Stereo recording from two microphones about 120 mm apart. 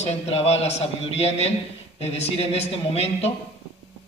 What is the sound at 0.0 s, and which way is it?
A man's voice, 65° left (ahead or behind).